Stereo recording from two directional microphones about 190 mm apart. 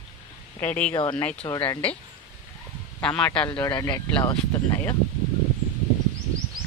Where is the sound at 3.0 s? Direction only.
5° left (ahead or behind).